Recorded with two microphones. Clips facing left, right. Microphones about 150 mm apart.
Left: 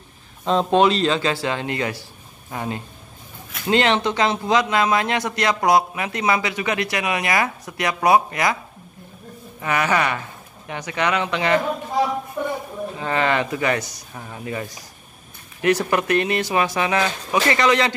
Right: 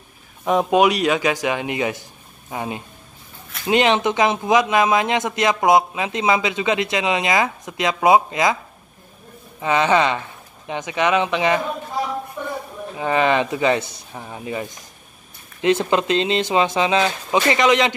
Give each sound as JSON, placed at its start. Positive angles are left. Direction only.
{"t": 0.5, "sound": "speech", "side_deg": -10}
{"t": 9.6, "sound": "speech", "side_deg": -20}
{"t": 12.4, "sound": "a sound", "side_deg": 10}
{"t": 12.9, "sound": "speech", "side_deg": -15}